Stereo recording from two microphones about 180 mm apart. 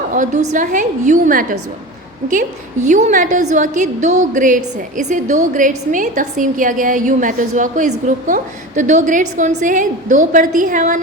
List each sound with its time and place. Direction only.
0.1 s a woman's voice: 45° right (ahead or behind)
2.8 s a woman's voice: 40° right (ahead or behind)